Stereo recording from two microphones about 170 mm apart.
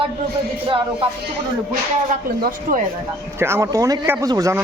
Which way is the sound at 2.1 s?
55° right (ahead or behind).